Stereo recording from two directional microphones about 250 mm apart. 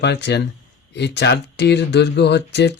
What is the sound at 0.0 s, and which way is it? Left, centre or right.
Speech, left.